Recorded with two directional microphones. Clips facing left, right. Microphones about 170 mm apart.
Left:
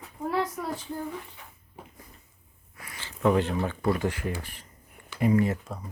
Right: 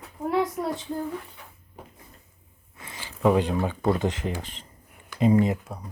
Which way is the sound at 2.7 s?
25° right (ahead or behind).